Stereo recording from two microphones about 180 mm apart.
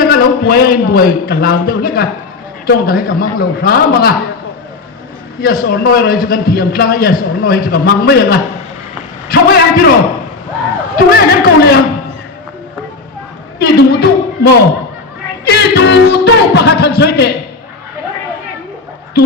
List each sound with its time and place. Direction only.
0.0 s a man's voice: 55° left (ahead or behind)
5.4 s a man's voice: 55° left (ahead or behind)
10.9 s a man's voice: 60° left (ahead or behind)
13.6 s speech: 60° left (ahead or behind)
15.4 s music: 65° left (ahead or behind)